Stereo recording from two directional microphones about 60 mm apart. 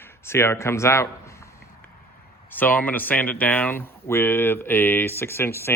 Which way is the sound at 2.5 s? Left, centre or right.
Left.